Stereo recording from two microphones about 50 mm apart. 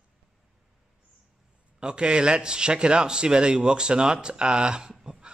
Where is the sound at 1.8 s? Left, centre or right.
Centre.